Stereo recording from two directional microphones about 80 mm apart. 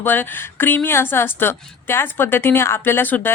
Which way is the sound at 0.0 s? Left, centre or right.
Left.